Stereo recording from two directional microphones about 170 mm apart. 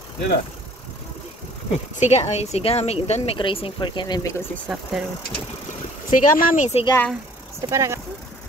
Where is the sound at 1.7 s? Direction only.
45° left (ahead or behind); by 4.6 s 15° left (ahead or behind).